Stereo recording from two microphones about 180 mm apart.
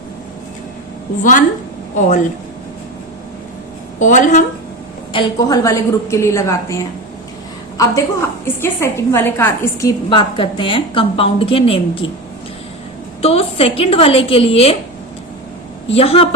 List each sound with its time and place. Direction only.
1.2 s a woman's voice: 45° left (ahead or behind)
4.0 s a woman's voice: 45° left (ahead or behind)
5.1 s a woman's voice: 25° left (ahead or behind)
8.6 s a woman's voice: 15° left (ahead or behind)
10.1 s a woman's voice: 30° left (ahead or behind)
13.2 s a woman's voice: 35° left (ahead or behind)
15.9 s a woman's voice: 35° left (ahead or behind)